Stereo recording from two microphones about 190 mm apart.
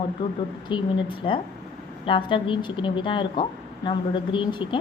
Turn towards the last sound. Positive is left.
turn(degrees=25)  # may be behind; listen again after turning